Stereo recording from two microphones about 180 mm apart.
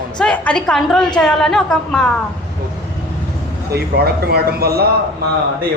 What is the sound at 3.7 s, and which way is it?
Speech, 60° right (ahead or behind).